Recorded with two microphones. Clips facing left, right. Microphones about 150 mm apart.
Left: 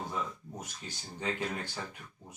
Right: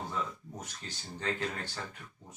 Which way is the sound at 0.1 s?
10° left (ahead or behind).